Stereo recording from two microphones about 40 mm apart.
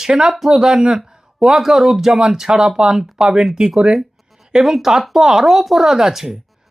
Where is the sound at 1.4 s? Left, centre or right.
Centre.